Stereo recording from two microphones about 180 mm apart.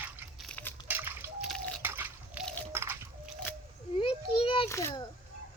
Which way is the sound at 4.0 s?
30° left (ahead or behind).